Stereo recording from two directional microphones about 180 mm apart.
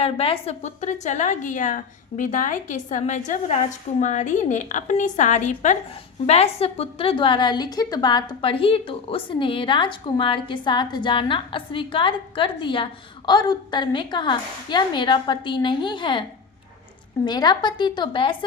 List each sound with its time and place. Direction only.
0.0 s a woman's voice: 30° left (ahead or behind)
17.2 s a woman's voice: 25° left (ahead or behind)